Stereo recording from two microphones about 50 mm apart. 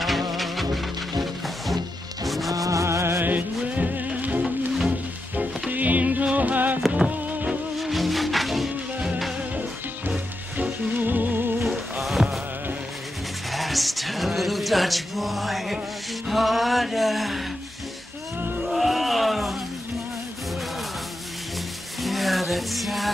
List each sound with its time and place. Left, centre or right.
0.0 s music: centre
2.7 s music: right
3.2 s music: right
7.8 s music: centre
11.0 s music: right
11.6 s music: centre
13.5 s music: centre
18.7 s a sound: centre
22.0 s music: centre